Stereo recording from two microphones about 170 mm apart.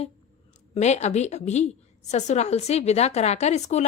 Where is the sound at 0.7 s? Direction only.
40° left (ahead or behind).